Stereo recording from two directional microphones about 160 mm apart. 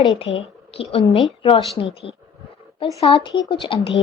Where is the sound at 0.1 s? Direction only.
35° left (ahead or behind).